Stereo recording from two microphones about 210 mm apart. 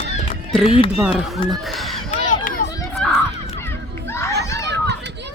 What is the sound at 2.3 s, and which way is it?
Run, 40° left (ahead or behind).